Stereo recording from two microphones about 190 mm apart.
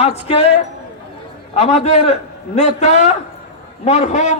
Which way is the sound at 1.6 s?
35° left (ahead or behind).